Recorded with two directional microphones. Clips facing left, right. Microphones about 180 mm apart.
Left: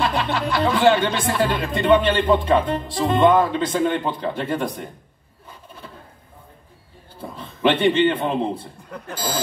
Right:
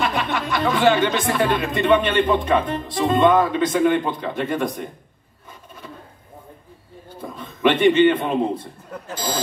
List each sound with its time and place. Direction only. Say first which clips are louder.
0.0 s speech: left 1 dB; 30° left (ahead or behind)
7.2 s a man's voice: even; 30° left (ahead or behind)
8.9 s speech: right 1 dB; 5° right (ahead or behind)